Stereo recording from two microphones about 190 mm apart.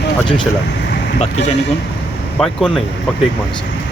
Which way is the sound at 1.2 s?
35° left (ahead or behind).